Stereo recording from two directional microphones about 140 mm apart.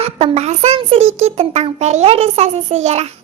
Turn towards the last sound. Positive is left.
turn(degrees=-50)  # may be behind; listen again after turning